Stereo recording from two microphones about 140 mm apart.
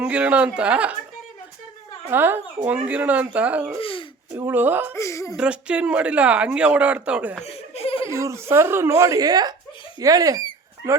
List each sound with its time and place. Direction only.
0.0 s speech: 10° right (ahead or behind)
2.0 s speech: 15° right (ahead or behind)
3.8 s speech: 40° left (ahead or behind)
4.4 s speech: 15° right (ahead or behind)
4.9 s speech: 20° left (ahead or behind)
5.4 s speech: 5° right (ahead or behind)
7.4 s laughter: 50° left (ahead or behind)
8.1 s speech: 20° right (ahead or behind)